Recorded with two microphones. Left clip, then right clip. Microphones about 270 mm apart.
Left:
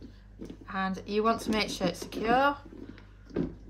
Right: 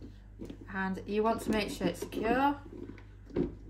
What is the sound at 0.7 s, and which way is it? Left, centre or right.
Speech, centre.